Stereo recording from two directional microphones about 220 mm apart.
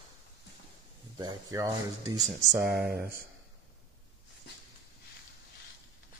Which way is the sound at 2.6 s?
5° right (ahead or behind).